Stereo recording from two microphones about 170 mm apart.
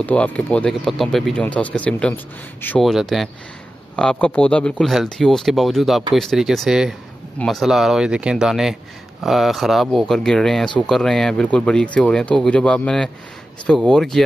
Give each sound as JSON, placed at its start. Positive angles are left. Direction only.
{"t": 0.0, "sound": "speech", "side_deg": 10}
{"t": 2.8, "sound": "speech", "side_deg": 0}